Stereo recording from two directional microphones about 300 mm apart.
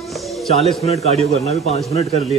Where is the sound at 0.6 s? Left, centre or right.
Centre.